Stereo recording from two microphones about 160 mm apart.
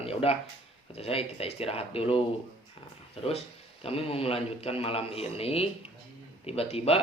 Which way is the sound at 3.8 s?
35° left (ahead or behind).